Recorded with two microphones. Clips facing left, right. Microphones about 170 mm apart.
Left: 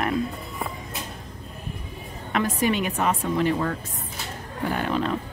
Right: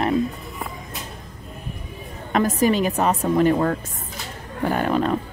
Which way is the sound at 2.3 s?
40° right (ahead or behind).